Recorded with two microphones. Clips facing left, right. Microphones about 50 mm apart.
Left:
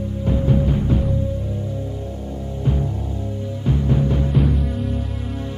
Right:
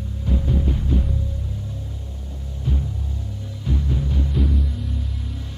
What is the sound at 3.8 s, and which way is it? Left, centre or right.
Timpani, left.